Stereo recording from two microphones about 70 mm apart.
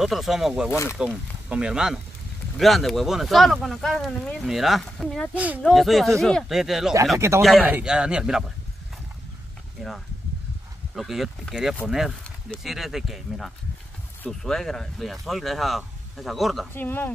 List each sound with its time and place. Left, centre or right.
0.0 s speech: centre
2.6 s speech: centre
5.3 s speech: right
5.7 s speech: centre
6.5 s speech: centre
7.2 s speech: right
7.8 s speech: centre
9.8 s speech: centre
11.0 s speech: centre
16.7 s speech: left